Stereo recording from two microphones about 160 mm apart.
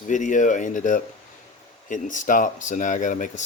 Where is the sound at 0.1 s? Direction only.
50° left (ahead or behind).